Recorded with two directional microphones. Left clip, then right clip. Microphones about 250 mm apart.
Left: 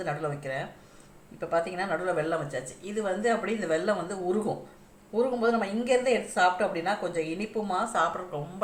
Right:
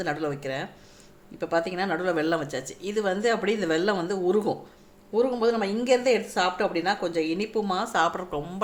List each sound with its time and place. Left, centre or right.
0.0 s speech: right